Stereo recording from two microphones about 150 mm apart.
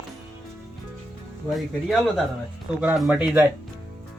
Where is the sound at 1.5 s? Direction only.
Centre (ahead or behind).